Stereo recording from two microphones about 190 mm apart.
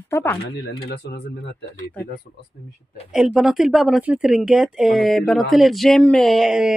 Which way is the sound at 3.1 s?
Centre (ahead or behind).